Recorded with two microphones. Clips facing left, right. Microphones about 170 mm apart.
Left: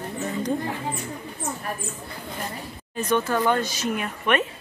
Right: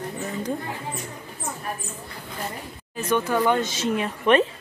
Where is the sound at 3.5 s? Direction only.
20° right (ahead or behind).